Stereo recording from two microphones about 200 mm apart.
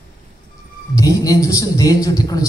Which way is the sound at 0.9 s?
15° left (ahead or behind).